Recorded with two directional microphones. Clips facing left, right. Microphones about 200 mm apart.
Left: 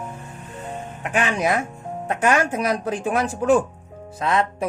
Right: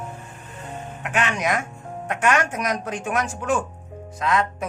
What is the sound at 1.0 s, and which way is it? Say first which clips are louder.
Speech: left 3 dB; 35° left (ahead or behind).